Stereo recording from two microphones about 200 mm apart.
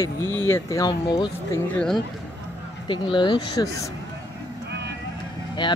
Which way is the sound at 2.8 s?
25° left (ahead or behind).